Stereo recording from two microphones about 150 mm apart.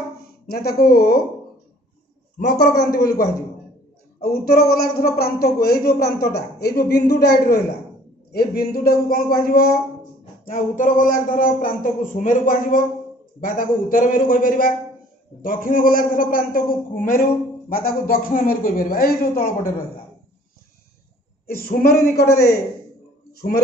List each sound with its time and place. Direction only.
0.5 s a man's voice: 90° left
2.3 s a woman's voice: 90° left
3.0 s a woman's voice: 25° left (ahead or behind)
4.2 s a man's voice: 90° left; by 9.8 s 75° left (ahead or behind)
10.4 s a man's voice: 65° left (ahead or behind)
21.5 s a woman's voice: 75° left (ahead or behind)